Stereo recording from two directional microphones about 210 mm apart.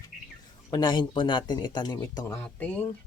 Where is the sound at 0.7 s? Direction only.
20° left (ahead or behind).